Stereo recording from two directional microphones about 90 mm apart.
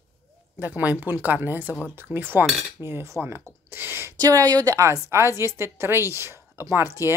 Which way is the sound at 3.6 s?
25° right (ahead or behind).